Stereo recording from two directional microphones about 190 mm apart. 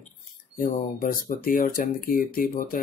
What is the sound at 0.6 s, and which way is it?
Speech, 50° left (ahead or behind).